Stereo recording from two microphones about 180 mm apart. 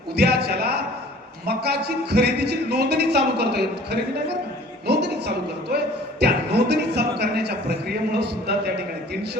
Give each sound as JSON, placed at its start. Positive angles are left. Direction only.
{"t": 0.2, "sound": "a man's voice", "side_deg": -60}
{"t": 4.9, "sound": "a woman's voice", "side_deg": -65}